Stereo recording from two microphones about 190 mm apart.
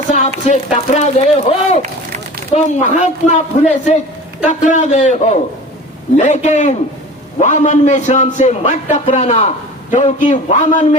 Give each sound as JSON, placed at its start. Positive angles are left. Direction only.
{"t": 0.1, "sound": "a man's voice", "side_deg": 40}